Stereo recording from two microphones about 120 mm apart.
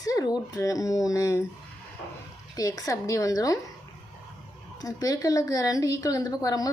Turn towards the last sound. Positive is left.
turn(degrees=30)  # may be behind; listen again after turning